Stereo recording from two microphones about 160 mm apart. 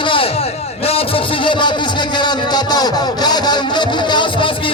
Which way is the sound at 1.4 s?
30° left (ahead or behind).